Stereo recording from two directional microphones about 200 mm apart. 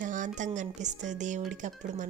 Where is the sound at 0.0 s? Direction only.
40° right (ahead or behind).